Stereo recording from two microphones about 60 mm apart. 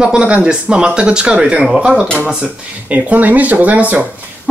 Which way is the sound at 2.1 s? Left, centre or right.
Right.